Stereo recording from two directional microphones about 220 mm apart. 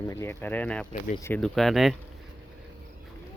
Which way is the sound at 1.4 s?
Centre (ahead or behind).